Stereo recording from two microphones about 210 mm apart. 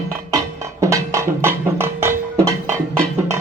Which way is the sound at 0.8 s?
15° right (ahead or behind).